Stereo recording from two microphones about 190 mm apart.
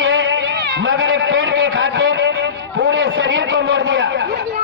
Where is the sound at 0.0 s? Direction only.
90° right.